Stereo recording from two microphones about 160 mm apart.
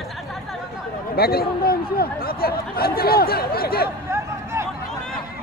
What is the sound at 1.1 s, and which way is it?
Speech, 75° left (ahead or behind).